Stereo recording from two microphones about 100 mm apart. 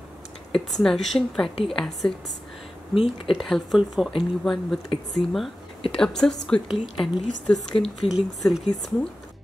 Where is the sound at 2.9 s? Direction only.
65° left (ahead or behind).